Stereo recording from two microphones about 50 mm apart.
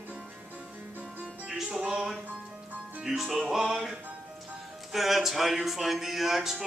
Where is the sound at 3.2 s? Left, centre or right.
Centre.